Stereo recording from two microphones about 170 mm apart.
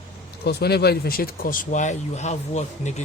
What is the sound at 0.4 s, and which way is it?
Speech, 70° left (ahead or behind).